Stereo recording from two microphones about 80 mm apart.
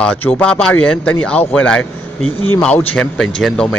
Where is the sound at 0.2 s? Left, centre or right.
Centre.